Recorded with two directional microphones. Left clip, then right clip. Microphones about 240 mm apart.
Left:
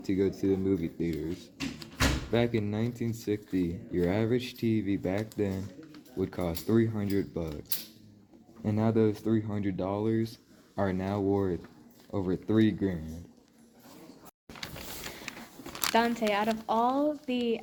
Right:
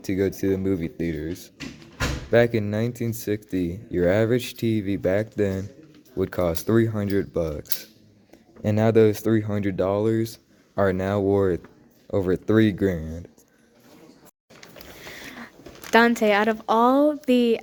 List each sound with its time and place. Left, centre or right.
0.0 s speech: right
8.6 s speech: right
14.6 s a sound: left
15.9 s speech: right